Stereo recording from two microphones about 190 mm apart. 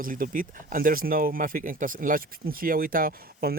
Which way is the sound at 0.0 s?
45° right (ahead or behind).